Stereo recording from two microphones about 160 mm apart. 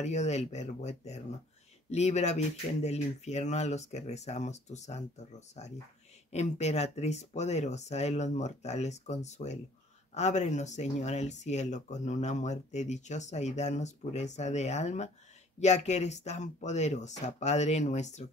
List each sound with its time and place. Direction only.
0.0 s speech: 45° left (ahead or behind)